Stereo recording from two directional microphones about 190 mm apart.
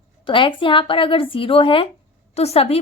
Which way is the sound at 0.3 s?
25° left (ahead or behind).